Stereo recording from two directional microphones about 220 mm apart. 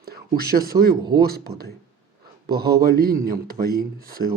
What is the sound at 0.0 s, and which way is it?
Speech, 45° right (ahead or behind).